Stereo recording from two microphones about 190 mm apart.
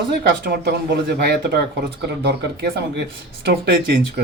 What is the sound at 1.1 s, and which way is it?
Speech, 55° right (ahead or behind).